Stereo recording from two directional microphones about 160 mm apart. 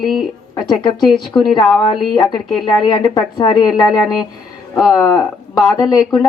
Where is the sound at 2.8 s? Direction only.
25° left (ahead or behind).